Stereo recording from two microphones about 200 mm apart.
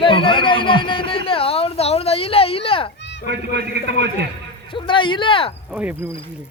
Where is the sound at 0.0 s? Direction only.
25° left (ahead or behind).